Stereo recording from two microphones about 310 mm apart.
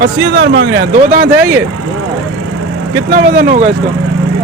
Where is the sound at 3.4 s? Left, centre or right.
Right.